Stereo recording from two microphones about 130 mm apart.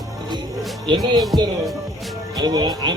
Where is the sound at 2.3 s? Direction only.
30° right (ahead or behind).